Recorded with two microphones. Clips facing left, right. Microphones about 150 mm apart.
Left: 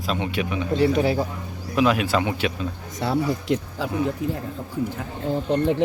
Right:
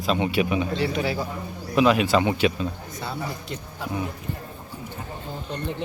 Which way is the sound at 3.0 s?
75° left (ahead or behind).